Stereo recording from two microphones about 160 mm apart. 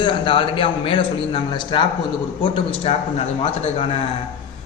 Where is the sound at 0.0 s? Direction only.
30° left (ahead or behind).